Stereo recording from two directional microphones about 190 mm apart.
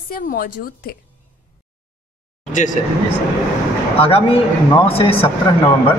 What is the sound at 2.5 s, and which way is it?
Speech, 40° left (ahead or behind).